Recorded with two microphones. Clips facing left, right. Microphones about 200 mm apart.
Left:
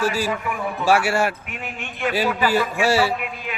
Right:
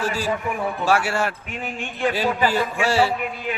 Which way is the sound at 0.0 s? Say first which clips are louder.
Left 1 dB; 10° left (ahead or behind).